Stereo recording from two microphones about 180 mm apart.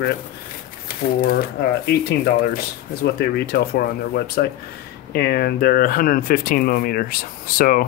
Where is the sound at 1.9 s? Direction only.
60° left (ahead or behind).